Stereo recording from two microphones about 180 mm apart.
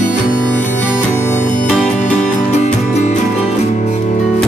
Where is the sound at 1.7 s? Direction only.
Centre (ahead or behind).